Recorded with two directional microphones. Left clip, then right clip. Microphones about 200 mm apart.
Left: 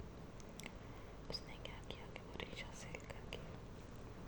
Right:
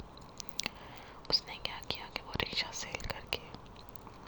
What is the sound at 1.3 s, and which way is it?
Whispering, 15° right (ahead or behind).